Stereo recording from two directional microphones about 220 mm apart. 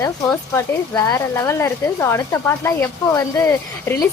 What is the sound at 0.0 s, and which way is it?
Speech, 15° left (ahead or behind).